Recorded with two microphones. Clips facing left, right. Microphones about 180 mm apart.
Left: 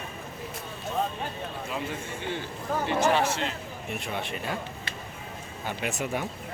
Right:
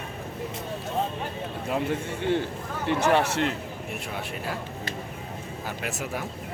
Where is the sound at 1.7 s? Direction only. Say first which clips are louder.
Right 9 dB; 55° right (ahead or behind).